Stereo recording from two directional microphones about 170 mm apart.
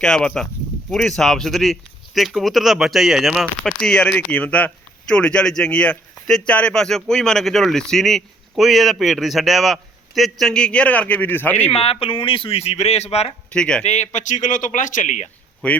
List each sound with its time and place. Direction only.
0.0 s speech: 5° left (ahead or behind)
11.7 s speech: 35° left (ahead or behind)
13.5 s speech: 5° left (ahead or behind)
13.8 s a man's voice: 40° left (ahead or behind)
15.6 s speech: 5° left (ahead or behind)